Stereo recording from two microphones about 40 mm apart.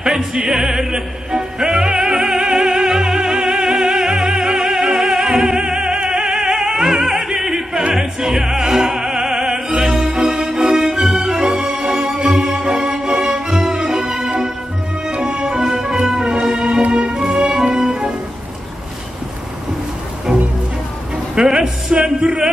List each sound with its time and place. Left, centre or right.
0.5 s opera: centre
10.1 s music: centre
21.4 s a sound: centre
21.9 s speech: right